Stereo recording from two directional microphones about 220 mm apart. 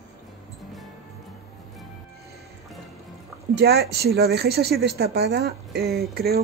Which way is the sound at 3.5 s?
45° right (ahead or behind).